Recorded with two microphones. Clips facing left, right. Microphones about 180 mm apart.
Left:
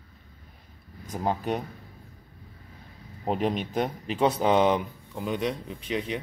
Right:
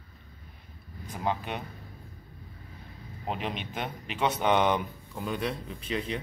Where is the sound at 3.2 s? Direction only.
40° left (ahead or behind).